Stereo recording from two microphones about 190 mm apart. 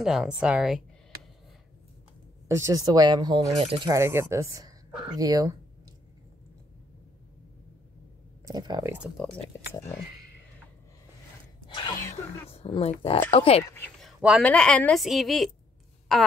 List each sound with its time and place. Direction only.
0.0 s a woman's voice: 5° right (ahead or behind)
2.4 s speech: 15° right (ahead or behind); by 3.9 s 30° right (ahead or behind)
3.9 s speech: 15° right (ahead or behind)
8.5 s speech: 20° right (ahead or behind)
9.2 s a woman's voice: centre (ahead or behind)
9.5 s speech: 15° left (ahead or behind)
11.6 s a sound: 25° left (ahead or behind)
12.4 s speech: 30° left (ahead or behind)
14.0 s bleat: 5° right (ahead or behind)
14.4 s a woman's voice: 5° left (ahead or behind)